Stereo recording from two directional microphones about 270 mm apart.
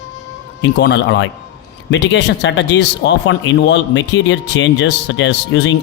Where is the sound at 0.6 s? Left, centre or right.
Left.